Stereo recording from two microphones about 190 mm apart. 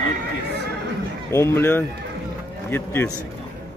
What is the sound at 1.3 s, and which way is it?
Speech, 15° left (ahead or behind).